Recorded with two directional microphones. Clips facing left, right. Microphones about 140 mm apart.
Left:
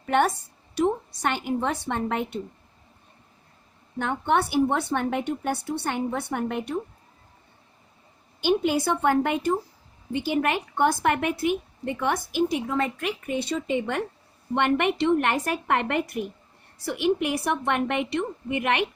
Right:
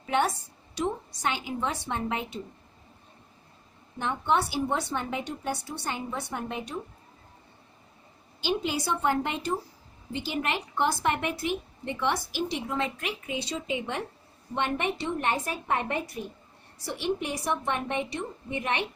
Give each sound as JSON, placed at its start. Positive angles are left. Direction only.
{"t": 0.0, "sound": "a woman's voice", "side_deg": 55}
{"t": 3.9, "sound": "a woman's voice", "side_deg": 60}
{"t": 8.4, "sound": "a woman's voice", "side_deg": 55}